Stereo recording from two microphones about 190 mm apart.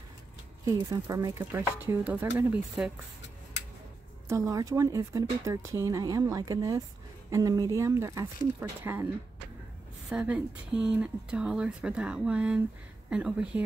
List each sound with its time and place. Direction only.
0.7 s speech: 15° right (ahead or behind)
4.3 s speech: 15° right (ahead or behind)